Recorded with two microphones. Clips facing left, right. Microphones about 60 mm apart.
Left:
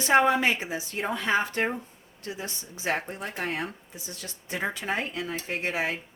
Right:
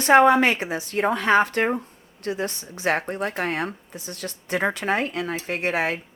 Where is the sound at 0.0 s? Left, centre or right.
Right.